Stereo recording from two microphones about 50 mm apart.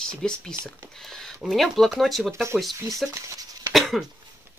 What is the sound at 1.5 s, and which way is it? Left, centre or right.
Speech, centre.